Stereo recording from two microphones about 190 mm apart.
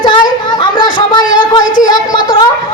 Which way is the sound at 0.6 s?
25° left (ahead or behind).